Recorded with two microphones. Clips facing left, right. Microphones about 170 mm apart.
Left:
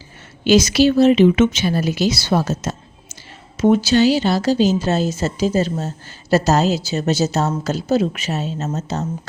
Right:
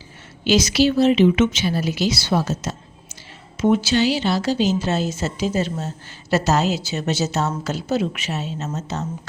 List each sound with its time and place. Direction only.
0.4 s a woman's voice: 50° left (ahead or behind)